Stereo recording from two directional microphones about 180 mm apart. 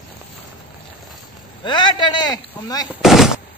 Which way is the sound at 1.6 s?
25° left (ahead or behind).